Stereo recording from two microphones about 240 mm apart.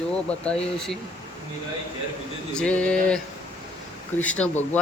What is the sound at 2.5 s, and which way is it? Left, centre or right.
A man's voice, centre.